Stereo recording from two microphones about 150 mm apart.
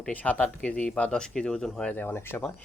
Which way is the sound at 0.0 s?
10° left (ahead or behind).